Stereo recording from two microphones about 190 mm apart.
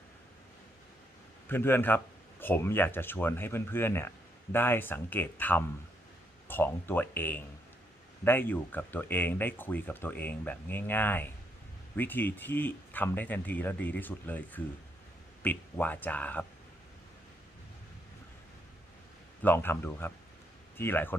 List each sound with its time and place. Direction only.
1.5 s speech: 10° left (ahead or behind)
19.4 s speech: 10° left (ahead or behind)